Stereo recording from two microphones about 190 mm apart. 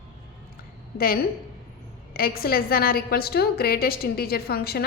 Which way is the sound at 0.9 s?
50° left (ahead or behind).